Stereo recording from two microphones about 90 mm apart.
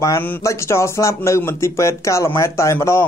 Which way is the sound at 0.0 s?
35° left (ahead or behind).